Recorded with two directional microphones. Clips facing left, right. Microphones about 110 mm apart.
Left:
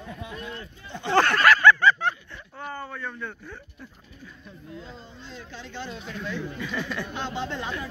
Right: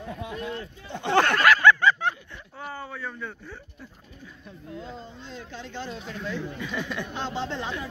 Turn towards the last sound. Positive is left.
turn(degrees=-25)  # may be behind; listen again after turning